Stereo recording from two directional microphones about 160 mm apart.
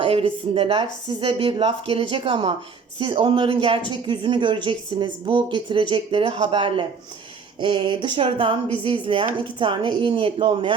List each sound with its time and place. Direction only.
0.0 s speech: 35° right (ahead or behind)